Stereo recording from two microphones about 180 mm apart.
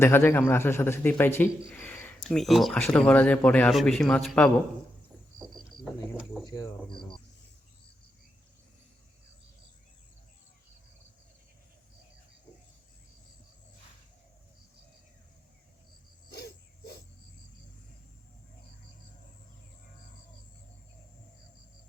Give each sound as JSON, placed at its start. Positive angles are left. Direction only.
{"t": 0.0, "sound": "a man's voice", "side_deg": 15}
{"t": 5.8, "sound": "a man's voice", "side_deg": 0}
{"t": 6.4, "sound": "speech", "side_deg": 20}
{"t": 16.3, "sound": "dog", "side_deg": 65}